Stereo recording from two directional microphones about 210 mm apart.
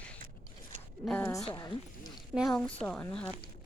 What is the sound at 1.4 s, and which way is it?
Speech, 20° left (ahead or behind).